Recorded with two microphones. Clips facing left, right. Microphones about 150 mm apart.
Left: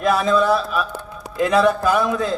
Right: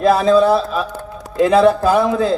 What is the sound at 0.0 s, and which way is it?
A man's voice, 30° right (ahead or behind).